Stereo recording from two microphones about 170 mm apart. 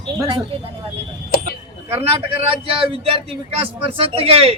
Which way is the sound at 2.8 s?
35° right (ahead or behind).